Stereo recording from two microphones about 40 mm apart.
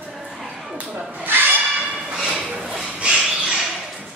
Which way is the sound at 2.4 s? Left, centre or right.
Right.